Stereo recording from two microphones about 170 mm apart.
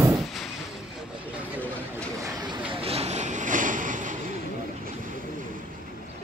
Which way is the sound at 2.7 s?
35° right (ahead or behind).